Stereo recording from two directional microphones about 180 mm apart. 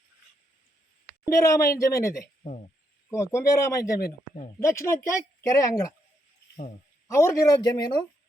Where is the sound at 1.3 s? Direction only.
15° left (ahead or behind).